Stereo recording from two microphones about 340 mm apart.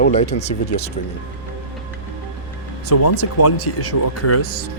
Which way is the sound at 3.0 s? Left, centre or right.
Left.